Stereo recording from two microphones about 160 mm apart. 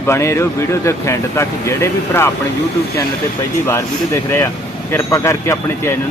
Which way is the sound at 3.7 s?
15° left (ahead or behind).